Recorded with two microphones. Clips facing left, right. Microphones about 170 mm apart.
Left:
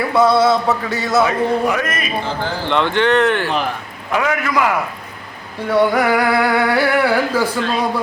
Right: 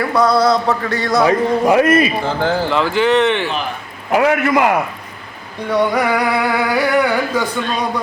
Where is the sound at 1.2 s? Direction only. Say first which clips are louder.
Right 3 dB; 30° right (ahead or behind).